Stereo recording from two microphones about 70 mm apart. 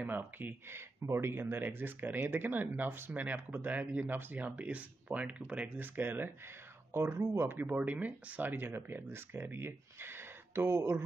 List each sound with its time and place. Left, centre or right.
0.0 s speech: right